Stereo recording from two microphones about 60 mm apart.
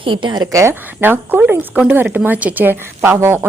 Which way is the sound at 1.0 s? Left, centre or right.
Right.